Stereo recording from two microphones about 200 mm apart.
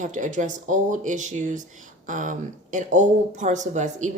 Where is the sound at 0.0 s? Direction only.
40° right (ahead or behind).